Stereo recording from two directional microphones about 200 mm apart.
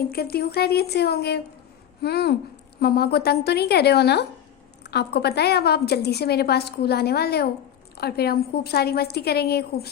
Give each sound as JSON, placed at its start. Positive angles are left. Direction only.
{"t": 0.1, "sound": "a woman's voice", "side_deg": 50}